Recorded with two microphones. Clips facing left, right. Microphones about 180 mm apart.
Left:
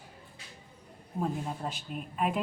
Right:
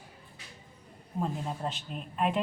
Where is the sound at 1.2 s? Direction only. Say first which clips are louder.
Even; centre (ahead or behind).